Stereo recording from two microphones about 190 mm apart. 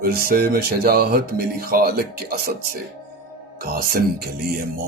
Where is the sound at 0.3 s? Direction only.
50° right (ahead or behind).